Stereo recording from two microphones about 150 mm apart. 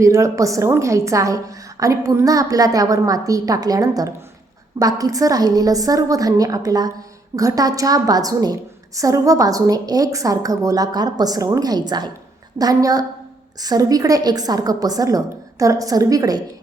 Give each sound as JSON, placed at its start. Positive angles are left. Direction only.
{"t": 0.0, "sound": "a woman's voice", "side_deg": -20}